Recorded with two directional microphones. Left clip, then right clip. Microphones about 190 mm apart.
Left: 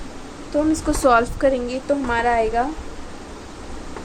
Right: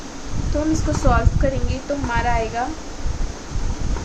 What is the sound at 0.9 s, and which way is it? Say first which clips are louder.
A woman's voice: left 5 dB; 45° left (ahead or behind).